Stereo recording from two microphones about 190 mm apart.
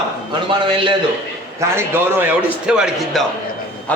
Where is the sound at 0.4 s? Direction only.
25° right (ahead or behind).